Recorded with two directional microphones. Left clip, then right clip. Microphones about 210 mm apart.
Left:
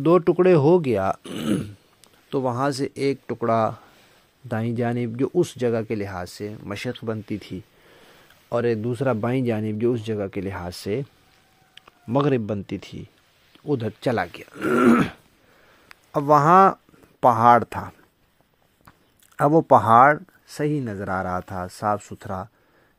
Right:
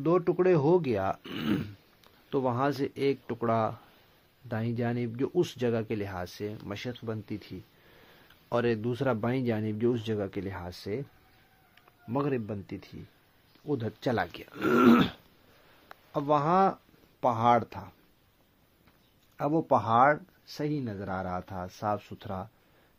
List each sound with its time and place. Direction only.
0.0 s speech: 35° left (ahead or behind)
8.5 s speech: 15° left (ahead or behind); by 11.1 s 30° left (ahead or behind)
11.7 s speech: 40° left (ahead or behind)
13.7 s speech: 25° left (ahead or behind)
15.9 s speech: 40° left (ahead or behind)
19.3 s speech: 45° left (ahead or behind); by 22.5 s 25° left (ahead or behind)